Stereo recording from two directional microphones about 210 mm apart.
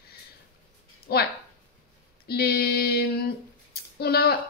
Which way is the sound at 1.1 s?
50° left (ahead or behind).